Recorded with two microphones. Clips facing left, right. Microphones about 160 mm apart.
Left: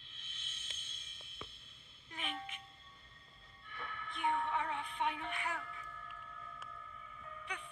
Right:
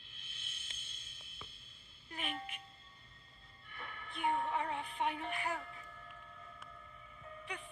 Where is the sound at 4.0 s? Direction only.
35° right (ahead or behind).